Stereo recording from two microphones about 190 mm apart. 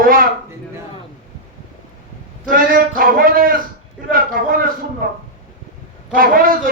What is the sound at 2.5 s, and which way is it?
A man's voice, 45° right (ahead or behind).